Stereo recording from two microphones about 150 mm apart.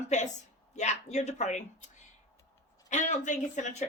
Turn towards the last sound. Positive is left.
turn(degrees=55)  # may be behind; listen again after turning